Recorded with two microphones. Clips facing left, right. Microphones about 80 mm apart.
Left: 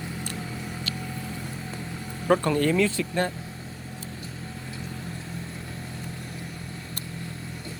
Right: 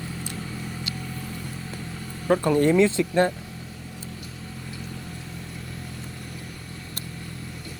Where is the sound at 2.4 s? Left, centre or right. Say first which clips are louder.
Right 4 dB; centre.